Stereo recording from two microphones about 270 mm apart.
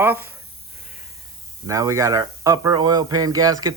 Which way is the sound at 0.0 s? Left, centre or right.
Centre.